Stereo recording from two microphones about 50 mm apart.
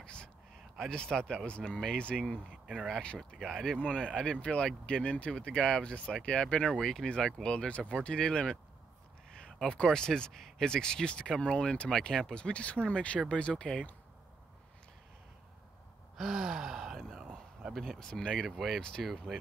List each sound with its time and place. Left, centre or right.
0.0 s a sound: centre
0.7 s speech: centre
2.3 s speech: centre
3.3 s speech: centre
3.8 s speech: centre
16.2 s speech: centre
17.7 s speech: centre